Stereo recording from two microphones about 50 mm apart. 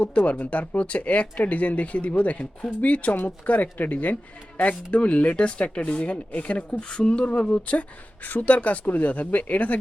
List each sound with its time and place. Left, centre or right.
0.3 s speech: left
7.8 s speech: left